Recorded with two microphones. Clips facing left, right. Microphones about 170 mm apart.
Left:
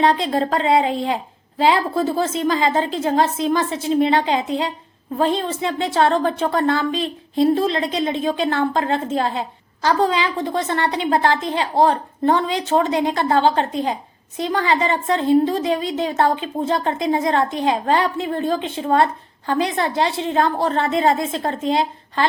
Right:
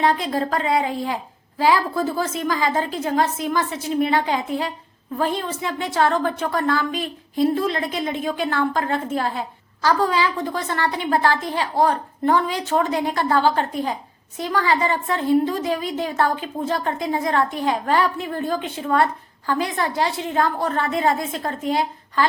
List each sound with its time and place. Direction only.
0.0 s a woman's voice: 25° left (ahead or behind)